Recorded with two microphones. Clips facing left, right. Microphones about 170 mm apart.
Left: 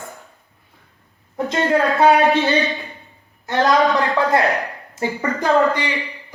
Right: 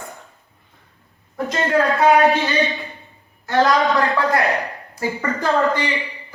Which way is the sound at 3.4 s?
20° left (ahead or behind).